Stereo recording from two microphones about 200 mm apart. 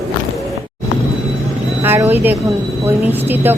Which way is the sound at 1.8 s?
10° right (ahead or behind).